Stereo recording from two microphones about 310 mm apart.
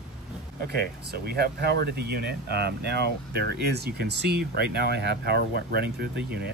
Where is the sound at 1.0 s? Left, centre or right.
Right.